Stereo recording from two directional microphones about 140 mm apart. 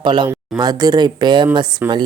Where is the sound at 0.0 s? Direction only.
35° right (ahead or behind).